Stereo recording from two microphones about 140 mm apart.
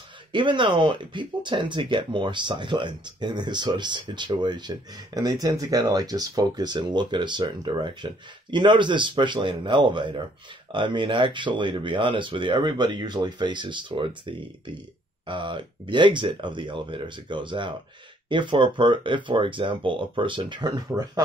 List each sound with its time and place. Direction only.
0.3 s speech: 35° right (ahead or behind)